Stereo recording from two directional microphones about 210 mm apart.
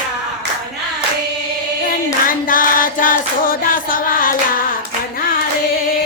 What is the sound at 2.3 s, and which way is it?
Music, 40° left (ahead or behind).